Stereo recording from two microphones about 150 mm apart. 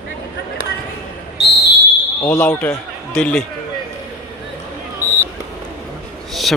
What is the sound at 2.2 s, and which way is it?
Speech, 15° left (ahead or behind).